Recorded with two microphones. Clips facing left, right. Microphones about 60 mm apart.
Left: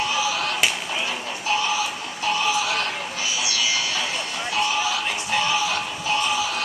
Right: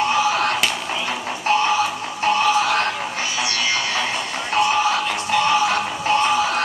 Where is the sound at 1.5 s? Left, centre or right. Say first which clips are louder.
Right 6 dB; right.